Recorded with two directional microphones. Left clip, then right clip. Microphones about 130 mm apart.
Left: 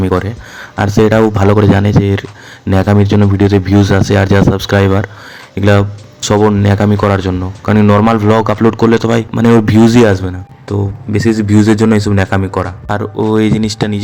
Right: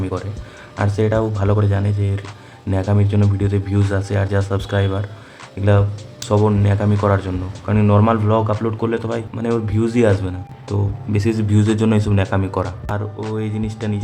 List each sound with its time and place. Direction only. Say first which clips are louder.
0.0 s speech: left 12 dB; 70° left (ahead or behind)
0.8 s speech: left 9 dB; 55° left (ahead or behind)
10.8 s speech: left 8 dB; 30° left (ahead or behind)
12.4 s speech: left 6 dB; 30° left (ahead or behind)
13.3 s speech: left 14 dB; 60° left (ahead or behind)